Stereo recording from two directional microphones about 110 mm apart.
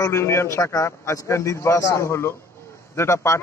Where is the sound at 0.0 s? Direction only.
25° left (ahead or behind).